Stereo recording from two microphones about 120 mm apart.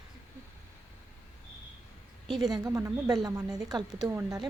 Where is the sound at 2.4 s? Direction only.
30° right (ahead or behind).